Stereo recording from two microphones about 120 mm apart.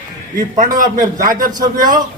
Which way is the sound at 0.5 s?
90° right.